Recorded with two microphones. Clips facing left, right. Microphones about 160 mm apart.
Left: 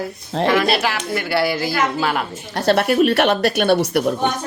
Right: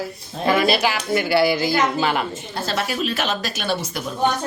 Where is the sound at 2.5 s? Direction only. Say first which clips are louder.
Left 10 dB; 65° left (ahead or behind).